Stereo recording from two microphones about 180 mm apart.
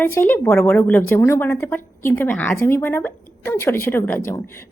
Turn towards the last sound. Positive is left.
turn(degrees=15)  # may be behind; listen again after turning